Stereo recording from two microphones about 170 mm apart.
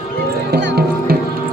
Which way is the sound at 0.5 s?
70° right (ahead or behind).